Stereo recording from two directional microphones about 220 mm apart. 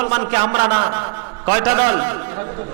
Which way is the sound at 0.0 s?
15° right (ahead or behind).